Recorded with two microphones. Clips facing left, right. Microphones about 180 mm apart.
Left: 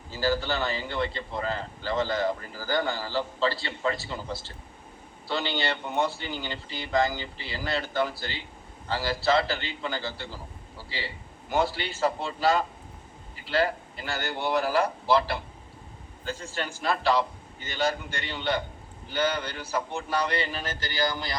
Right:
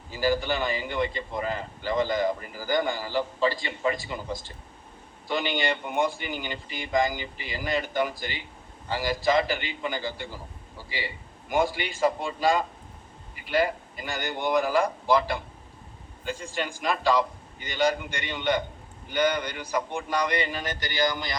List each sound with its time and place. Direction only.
0.1 s a man's voice: 15° right (ahead or behind)